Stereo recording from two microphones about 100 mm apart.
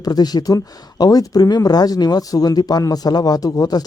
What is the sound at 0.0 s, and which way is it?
Speech, 40° left (ahead or behind).